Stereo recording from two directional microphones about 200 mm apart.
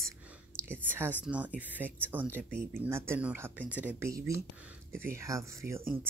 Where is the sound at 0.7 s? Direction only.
10° right (ahead or behind).